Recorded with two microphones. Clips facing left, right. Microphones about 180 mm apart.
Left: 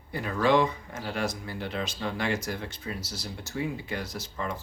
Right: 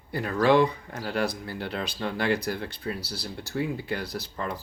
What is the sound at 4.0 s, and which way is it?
Speech, 35° right (ahead or behind).